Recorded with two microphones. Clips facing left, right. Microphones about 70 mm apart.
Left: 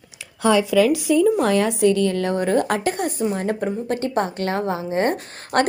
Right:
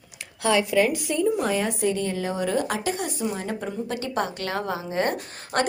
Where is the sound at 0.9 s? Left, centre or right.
Left.